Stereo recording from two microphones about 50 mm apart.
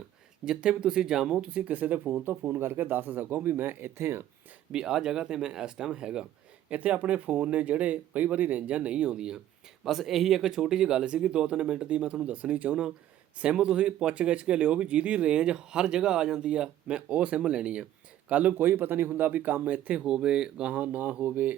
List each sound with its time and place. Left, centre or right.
0.4 s speech: centre
1.7 s speech: right
3.9 s speech: right
4.7 s speech: centre
6.7 s speech: right
9.8 s speech: centre; by 17.8 s right
18.3 s speech: right
20.1 s speech: centre
20.7 s speech: right